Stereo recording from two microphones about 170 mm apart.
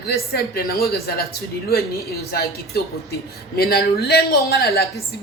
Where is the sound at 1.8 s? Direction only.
20° left (ahead or behind).